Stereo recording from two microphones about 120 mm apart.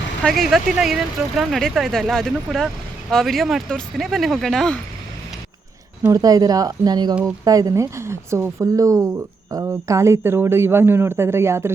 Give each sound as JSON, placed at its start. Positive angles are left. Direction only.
{"t": 0.2, "sound": "speech", "side_deg": 5}
{"t": 6.0, "sound": "a man's voice", "side_deg": -30}